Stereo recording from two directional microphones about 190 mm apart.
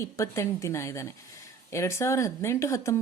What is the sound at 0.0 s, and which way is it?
A woman's voice, 15° left (ahead or behind).